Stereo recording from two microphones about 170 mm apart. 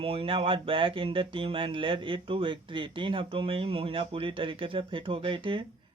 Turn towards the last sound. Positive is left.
turn(degrees=-30)  # may be behind; listen again after turning